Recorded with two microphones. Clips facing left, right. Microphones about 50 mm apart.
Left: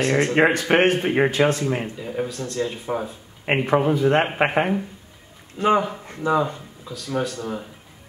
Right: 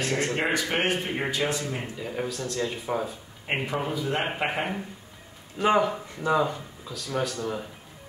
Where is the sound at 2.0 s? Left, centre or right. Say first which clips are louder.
Left 4 dB; centre.